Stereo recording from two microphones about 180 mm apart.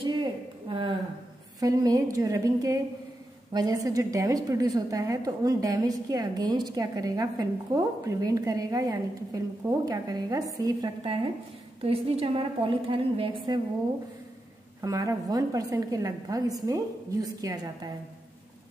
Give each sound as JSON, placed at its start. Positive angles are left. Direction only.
{"t": 0.0, "sound": "a sound", "side_deg": -30}
{"t": 1.6, "sound": "a woman's voice", "side_deg": -20}
{"t": 11.8, "sound": "a woman's voice", "side_deg": -35}
{"t": 14.8, "sound": "a woman's voice", "side_deg": -20}